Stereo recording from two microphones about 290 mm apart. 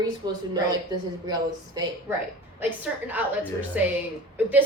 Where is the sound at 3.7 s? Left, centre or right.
Centre.